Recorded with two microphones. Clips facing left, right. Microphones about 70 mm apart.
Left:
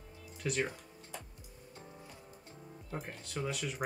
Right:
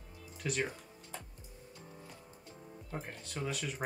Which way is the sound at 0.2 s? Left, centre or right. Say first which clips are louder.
Left 1 dB; centre.